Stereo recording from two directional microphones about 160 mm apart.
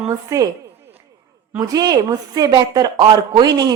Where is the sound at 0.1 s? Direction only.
20° right (ahead or behind).